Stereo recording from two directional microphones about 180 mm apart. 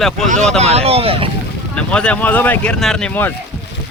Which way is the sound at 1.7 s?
5° left (ahead or behind).